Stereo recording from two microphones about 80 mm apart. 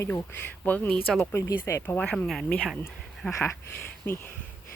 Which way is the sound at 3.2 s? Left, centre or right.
Centre.